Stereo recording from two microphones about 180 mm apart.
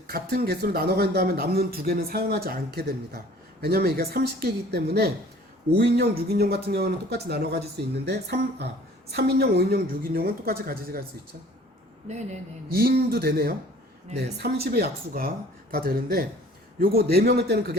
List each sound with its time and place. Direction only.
0.1 s speech: 60° right (ahead or behind)
12.0 s speech: 40° right (ahead or behind)
12.7 s speech: 60° right (ahead or behind)